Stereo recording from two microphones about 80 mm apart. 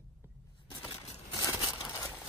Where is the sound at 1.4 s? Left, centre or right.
Left.